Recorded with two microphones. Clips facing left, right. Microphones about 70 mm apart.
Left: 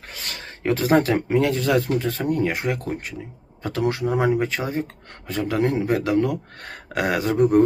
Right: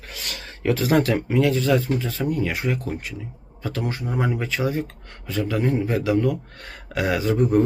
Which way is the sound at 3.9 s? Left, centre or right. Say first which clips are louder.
Left 5 dB; left.